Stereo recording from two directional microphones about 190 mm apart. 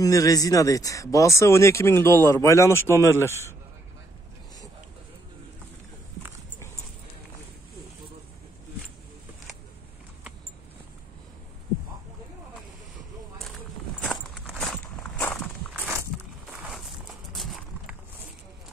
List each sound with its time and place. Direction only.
0.0 s speech: 20° left (ahead or behind)
14.0 s walk: 5° left (ahead or behind)
16.1 s walk: centre (ahead or behind)
17.3 s a sound: centre (ahead or behind)